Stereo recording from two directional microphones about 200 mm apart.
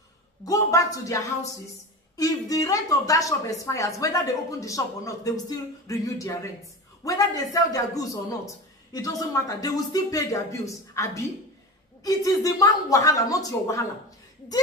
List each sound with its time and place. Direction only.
0.5 s a woman's voice: 15° left (ahead or behind)